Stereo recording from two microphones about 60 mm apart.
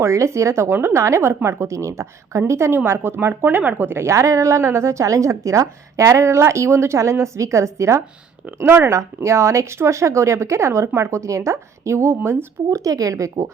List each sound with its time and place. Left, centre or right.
0.0 s a woman's voice: right
2.5 s speech: right
3.4 s a woman's voice: right
8.6 s speech: right
8.9 s a woman's voice: right
12.8 s speech: right